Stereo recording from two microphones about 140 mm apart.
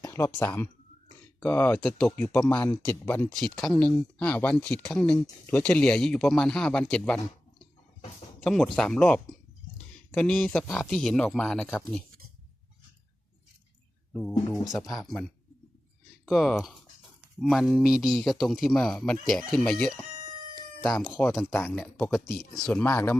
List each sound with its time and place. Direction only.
0.0 s speech: 20° left (ahead or behind); by 7.2 s 5° left (ahead or behind)
8.4 s speech: centre (ahead or behind)
14.1 s speech: 5° left (ahead or behind)
21.2 s speech: 10° left (ahead or behind)